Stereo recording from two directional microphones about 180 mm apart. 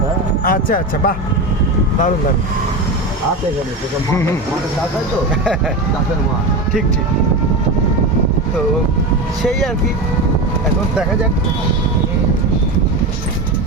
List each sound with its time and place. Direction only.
0.4 s speech: 50° left (ahead or behind)